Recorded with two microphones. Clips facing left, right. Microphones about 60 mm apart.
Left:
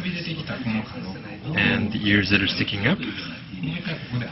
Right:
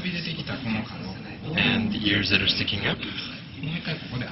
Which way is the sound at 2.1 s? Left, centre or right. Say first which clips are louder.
Left 4 dB; left.